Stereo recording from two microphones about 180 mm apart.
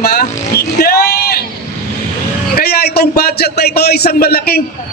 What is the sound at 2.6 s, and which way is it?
A man's voice, 60° left (ahead or behind).